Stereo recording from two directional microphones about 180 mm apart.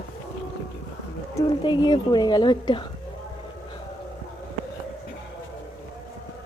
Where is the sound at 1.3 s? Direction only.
25° left (ahead or behind).